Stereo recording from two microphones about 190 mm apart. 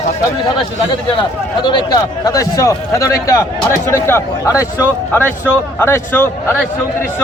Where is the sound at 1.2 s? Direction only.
25° left (ahead or behind).